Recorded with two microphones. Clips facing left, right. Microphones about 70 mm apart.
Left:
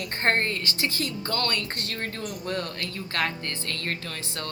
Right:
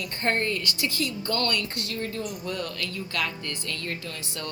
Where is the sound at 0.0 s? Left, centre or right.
Left.